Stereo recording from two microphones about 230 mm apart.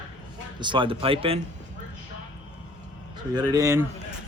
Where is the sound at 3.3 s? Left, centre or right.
Centre.